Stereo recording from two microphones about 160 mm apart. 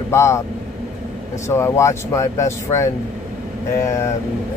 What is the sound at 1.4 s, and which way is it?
Speech, 15° left (ahead or behind).